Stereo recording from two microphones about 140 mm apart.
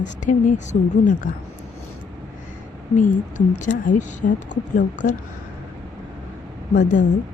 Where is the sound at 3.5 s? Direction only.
60° left (ahead or behind).